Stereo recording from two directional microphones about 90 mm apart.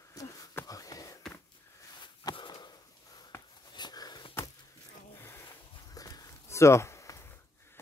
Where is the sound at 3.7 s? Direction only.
50° left (ahead or behind).